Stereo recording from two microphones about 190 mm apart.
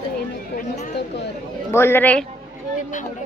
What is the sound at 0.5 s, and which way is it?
Speech, 45° left (ahead or behind).